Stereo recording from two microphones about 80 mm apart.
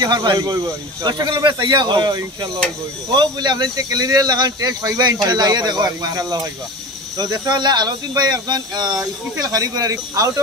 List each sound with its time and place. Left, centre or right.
0.0 s speech: right
5.2 s speech: right
9.4 s speech: right